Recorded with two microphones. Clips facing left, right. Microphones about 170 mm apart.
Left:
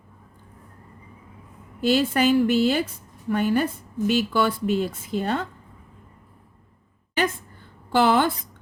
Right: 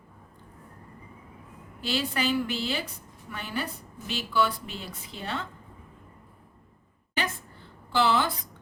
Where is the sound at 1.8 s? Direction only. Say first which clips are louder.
Left 9 dB; 50° left (ahead or behind).